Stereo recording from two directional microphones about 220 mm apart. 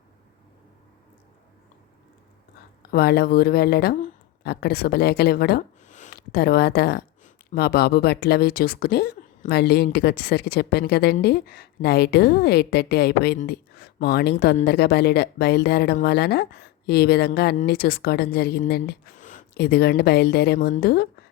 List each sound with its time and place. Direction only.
2.9 s a woman's voice: 45° left (ahead or behind)